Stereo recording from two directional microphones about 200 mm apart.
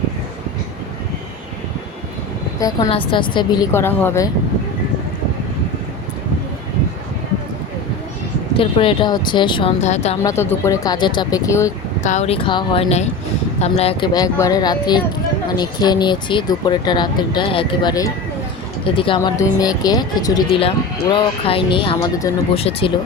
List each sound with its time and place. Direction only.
2.6 s speech: 15° left (ahead or behind)
8.5 s speech: 25° left (ahead or behind)
10.2 s speech: 10° left (ahead or behind)
12.0 s speech: 35° left (ahead or behind)
14.1 s speech: 15° left (ahead or behind)